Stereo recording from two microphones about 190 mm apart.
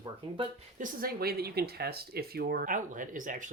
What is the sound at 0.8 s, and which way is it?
Speech, 55° right (ahead or behind).